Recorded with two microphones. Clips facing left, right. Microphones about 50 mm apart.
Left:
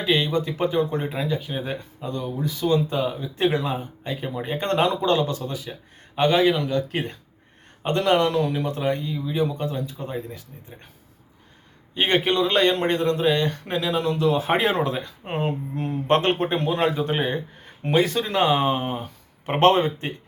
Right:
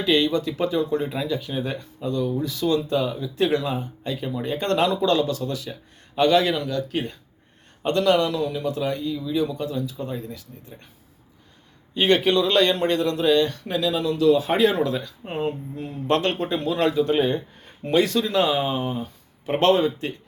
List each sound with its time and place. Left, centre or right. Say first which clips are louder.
0.0 s speech: right 2 dB; centre
1.0 s speech: even; left
11.9 s speech: right 2 dB; left
18.6 s speech: left 2 dB; left